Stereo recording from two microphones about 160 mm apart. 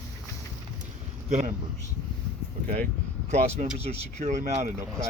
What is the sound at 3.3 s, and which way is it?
A man's voice, 45° right (ahead or behind).